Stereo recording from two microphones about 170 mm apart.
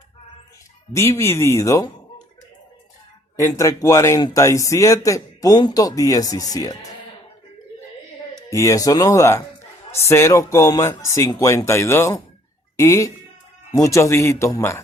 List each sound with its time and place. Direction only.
0.9 s speech: 15° left (ahead or behind)
3.3 s speech: 20° left (ahead or behind)
8.4 s speech: 15° left (ahead or behind)